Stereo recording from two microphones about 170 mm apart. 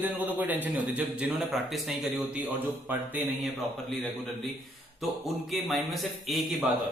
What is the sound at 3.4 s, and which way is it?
A man's voice, centre (ahead or behind).